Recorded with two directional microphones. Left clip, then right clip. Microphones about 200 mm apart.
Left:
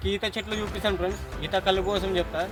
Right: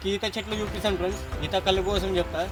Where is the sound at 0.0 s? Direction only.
5° left (ahead or behind).